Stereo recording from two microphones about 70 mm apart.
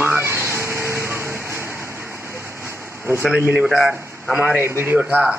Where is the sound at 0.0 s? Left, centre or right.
Right.